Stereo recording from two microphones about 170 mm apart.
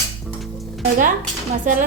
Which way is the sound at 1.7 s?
50° right (ahead or behind).